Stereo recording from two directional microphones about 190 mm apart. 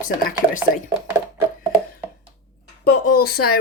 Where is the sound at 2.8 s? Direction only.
50° left (ahead or behind).